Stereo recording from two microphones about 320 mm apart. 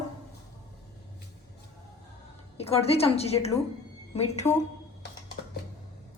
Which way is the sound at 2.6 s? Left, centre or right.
Centre.